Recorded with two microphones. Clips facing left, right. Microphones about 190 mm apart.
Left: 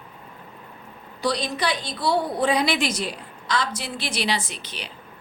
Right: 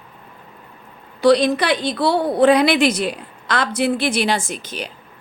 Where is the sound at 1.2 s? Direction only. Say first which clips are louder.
Right 11 dB; 65° right (ahead or behind).